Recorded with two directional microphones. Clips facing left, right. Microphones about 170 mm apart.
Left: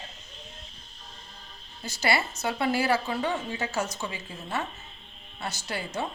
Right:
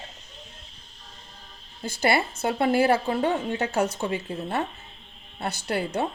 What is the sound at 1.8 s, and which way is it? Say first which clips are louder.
A woman's voice: right 4 dB; 55° right (ahead or behind).